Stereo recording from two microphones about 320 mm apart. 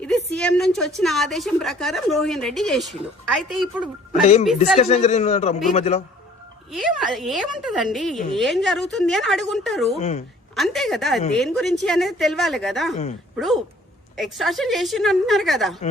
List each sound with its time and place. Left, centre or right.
0.3 s a woman's voice: centre
4.8 s a man's voice: left
6.7 s a woman's voice: centre
10.0 s a man's voice: left
10.5 s a woman's voice: centre